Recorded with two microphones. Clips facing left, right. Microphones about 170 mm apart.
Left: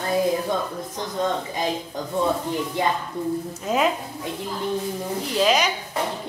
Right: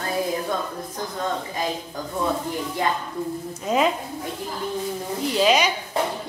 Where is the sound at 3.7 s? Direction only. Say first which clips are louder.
Right 1 dB; centre (ahead or behind).